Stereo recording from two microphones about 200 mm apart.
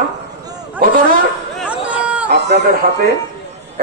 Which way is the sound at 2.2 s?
55° right (ahead or behind).